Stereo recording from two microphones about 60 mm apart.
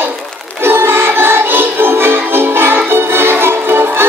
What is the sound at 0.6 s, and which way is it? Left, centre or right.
Music, right.